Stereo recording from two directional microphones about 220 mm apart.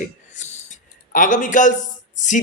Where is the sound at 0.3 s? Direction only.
30° left (ahead or behind).